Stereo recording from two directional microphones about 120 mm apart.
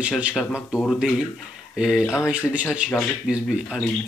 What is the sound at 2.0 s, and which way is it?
Speech, 20° left (ahead or behind).